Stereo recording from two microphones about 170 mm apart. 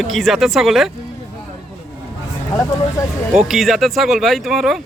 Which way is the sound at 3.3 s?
Centre (ahead or behind).